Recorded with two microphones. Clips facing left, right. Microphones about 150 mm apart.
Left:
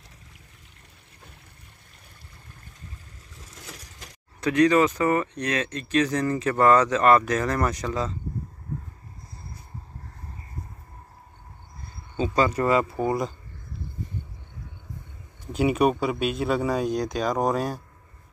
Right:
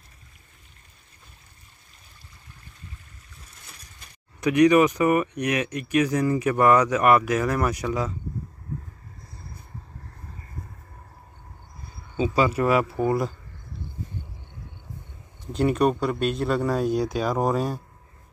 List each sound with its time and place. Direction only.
3.4 s boat: 90° left
4.4 s speech: 15° right (ahead or behind)
12.2 s speech: 10° right (ahead or behind)
15.5 s speech: 5° left (ahead or behind)